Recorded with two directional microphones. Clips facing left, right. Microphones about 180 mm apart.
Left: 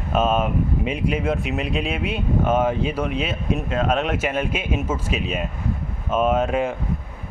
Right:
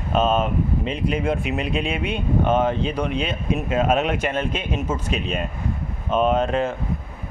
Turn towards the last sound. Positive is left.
turn(degrees=10)  # may be behind; listen again after turning